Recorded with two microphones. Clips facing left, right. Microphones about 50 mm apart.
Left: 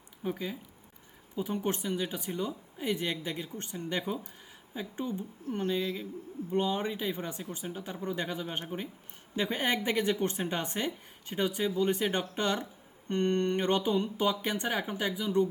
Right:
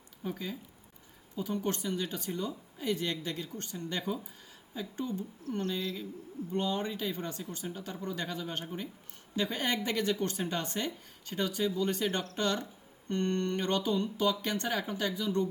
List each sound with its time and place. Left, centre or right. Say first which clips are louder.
0.2 s speech: left 3 dB; centre